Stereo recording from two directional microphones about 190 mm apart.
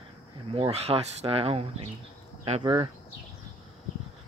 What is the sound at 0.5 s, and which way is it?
Speech, 30° right (ahead or behind).